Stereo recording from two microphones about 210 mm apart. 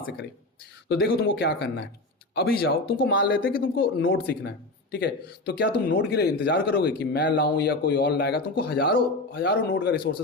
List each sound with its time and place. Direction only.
0.9 s speech: 45° left (ahead or behind)